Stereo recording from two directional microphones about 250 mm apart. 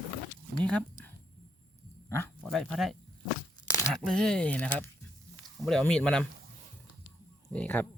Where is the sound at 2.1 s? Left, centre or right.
Centre.